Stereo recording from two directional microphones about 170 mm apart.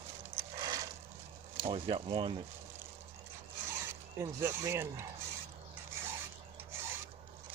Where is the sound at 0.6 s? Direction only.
25° right (ahead or behind).